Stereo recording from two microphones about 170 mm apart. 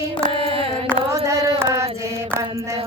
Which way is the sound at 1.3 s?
15° right (ahead or behind).